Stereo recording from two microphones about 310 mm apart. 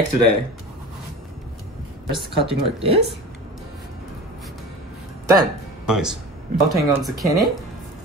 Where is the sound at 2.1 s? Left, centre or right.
Centre.